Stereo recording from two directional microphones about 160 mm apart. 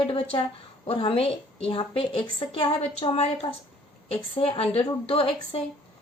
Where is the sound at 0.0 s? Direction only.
35° left (ahead or behind).